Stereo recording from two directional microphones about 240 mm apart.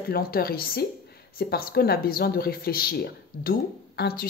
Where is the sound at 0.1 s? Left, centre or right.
Left.